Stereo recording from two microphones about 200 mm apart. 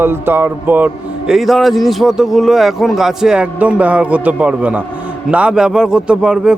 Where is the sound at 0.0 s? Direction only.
10° right (ahead or behind).